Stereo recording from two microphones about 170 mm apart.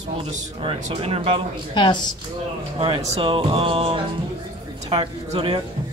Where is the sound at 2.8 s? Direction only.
35° right (ahead or behind).